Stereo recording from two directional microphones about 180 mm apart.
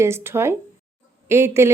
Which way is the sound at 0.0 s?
15° right (ahead or behind).